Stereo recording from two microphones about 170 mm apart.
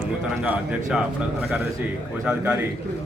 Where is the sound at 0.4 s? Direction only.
10° right (ahead or behind).